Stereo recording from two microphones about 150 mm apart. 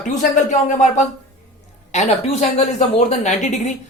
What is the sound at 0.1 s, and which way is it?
Speech, 55° left (ahead or behind).